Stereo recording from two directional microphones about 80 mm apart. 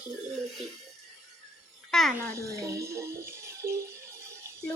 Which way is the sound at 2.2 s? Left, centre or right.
Right.